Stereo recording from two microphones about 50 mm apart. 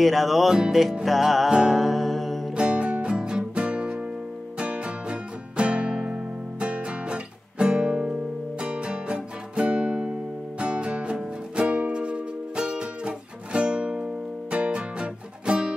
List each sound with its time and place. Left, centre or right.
0.0 s music: centre
1.5 s music: centre
1.8 s music: centre
2.5 s music: right